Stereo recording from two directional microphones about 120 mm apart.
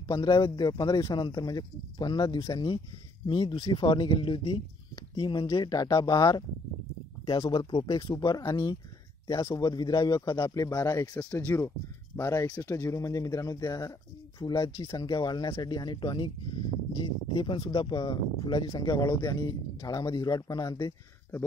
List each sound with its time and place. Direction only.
0.1 s speech: 40° left (ahead or behind)
8.2 s speech: 30° left (ahead or behind)